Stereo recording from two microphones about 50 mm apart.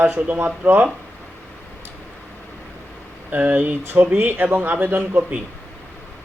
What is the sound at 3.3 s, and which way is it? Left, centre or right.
Speech, right.